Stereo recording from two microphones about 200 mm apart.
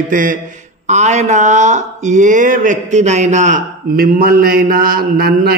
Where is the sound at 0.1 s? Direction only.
40° right (ahead or behind).